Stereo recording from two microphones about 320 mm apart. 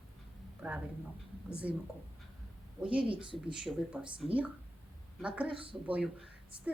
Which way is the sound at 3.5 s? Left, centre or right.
Centre.